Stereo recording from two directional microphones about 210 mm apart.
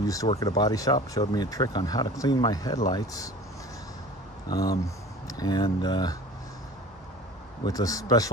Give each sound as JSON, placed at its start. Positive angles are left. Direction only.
{"t": 0.0, "sound": "speech", "side_deg": 15}
{"t": 4.5, "sound": "speech", "side_deg": 15}
{"t": 7.6, "sound": "speech", "side_deg": 15}